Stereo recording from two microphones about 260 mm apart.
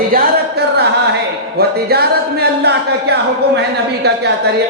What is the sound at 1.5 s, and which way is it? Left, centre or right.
Speech, right.